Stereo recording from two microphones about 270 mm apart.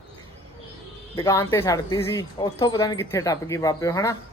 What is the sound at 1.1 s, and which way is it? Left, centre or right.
Speech, centre.